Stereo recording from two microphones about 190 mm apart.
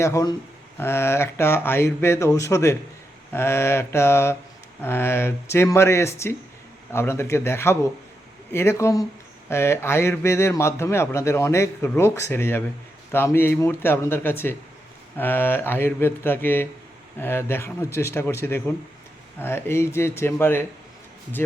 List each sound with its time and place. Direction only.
0.0 s a man's voice: 15° left (ahead or behind)